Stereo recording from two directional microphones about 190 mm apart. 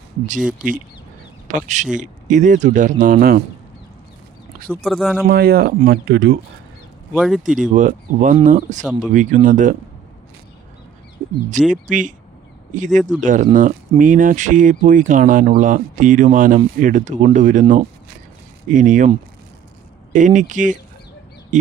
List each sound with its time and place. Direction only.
0.3 s speech: 5° right (ahead or behind)
1.5 s a man's voice: 40° right (ahead or behind)
4.8 s speech: centre (ahead or behind)
5.3 s speech: 55° right (ahead or behind)
7.2 s speech: centre (ahead or behind)
7.7 s speech: 40° right (ahead or behind)
11.7 s speech: 40° right (ahead or behind)
20.1 s speech: 40° right (ahead or behind)